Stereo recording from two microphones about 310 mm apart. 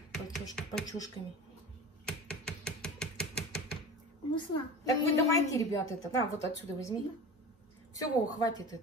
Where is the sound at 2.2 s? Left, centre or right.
Centre.